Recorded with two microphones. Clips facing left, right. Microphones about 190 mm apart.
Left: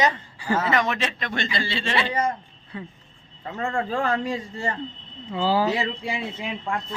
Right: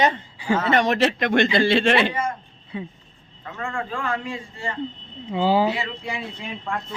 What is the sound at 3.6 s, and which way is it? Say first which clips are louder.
A man's voice: left 4 dB; 35° left (ahead or behind).